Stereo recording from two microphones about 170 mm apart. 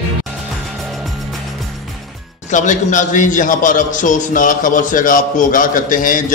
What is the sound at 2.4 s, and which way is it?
A man's voice, 45° left (ahead or behind).